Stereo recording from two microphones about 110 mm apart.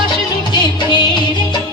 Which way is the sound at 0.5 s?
45° left (ahead or behind).